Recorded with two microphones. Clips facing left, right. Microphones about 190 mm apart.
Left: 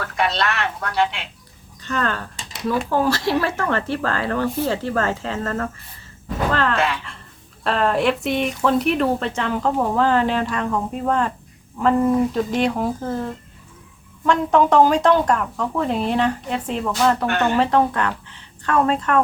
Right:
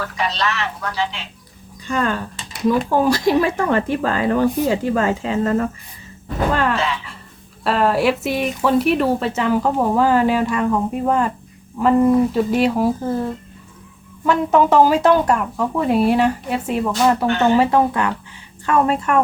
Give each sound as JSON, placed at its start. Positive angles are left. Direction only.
{"t": 0.2, "sound": "speech", "side_deg": 55}
{"t": 1.8, "sound": "speech", "side_deg": -10}
{"t": 6.7, "sound": "speech", "side_deg": 60}
{"t": 7.6, "sound": "speech", "side_deg": -5}